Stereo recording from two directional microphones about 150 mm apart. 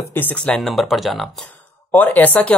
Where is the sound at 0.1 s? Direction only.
10° left (ahead or behind).